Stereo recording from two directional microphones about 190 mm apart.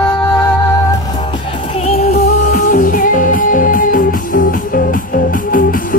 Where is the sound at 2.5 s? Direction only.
45° left (ahead or behind).